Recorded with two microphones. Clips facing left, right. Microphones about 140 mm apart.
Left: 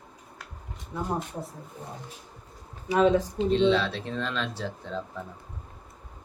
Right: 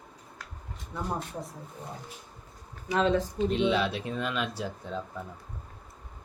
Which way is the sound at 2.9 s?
10° left (ahead or behind).